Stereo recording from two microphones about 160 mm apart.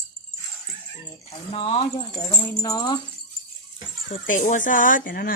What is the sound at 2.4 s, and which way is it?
Speech, 25° left (ahead or behind).